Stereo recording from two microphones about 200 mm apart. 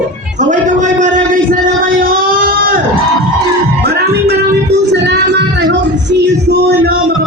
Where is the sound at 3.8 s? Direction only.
55° right (ahead or behind).